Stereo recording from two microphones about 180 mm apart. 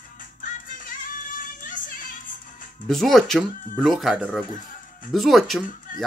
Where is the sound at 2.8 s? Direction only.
Centre (ahead or behind).